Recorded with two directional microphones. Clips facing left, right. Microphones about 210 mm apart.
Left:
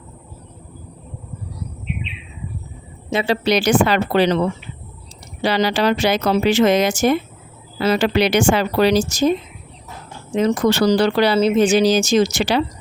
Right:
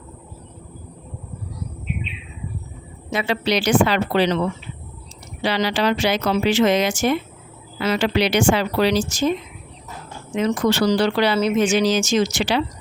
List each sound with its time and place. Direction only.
3.1 s a woman's voice: 25° left (ahead or behind)
3.4 s speech: 45° left (ahead or behind)
5.4 s speech: 40° left (ahead or behind)
8.0 s speech: 50° left (ahead or behind)
10.3 s speech: 40° left (ahead or behind)
11.3 s speech: 30° left (ahead or behind)